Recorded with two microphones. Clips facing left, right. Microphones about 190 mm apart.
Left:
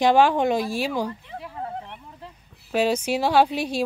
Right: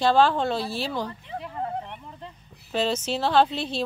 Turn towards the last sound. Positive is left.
turn(degrees=10)  # may be behind; listen again after turning